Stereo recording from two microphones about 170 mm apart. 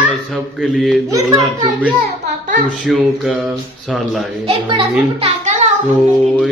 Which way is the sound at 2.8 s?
Centre (ahead or behind).